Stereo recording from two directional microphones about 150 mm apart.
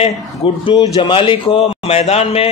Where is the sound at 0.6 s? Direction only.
30° left (ahead or behind).